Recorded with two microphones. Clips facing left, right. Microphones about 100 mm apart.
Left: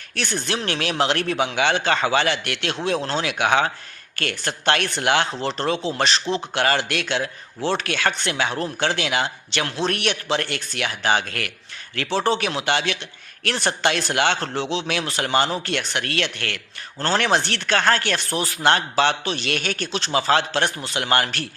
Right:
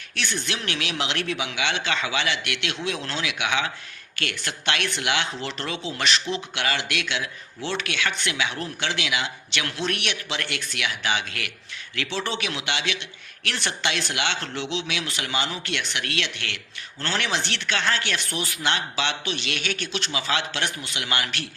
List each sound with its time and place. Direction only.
0.2 s speech: 40° left (ahead or behind)